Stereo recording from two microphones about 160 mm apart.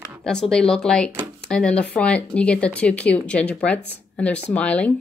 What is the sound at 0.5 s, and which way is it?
Speech, 5° left (ahead or behind).